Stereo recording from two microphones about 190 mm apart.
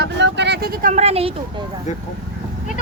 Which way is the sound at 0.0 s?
65° right (ahead or behind).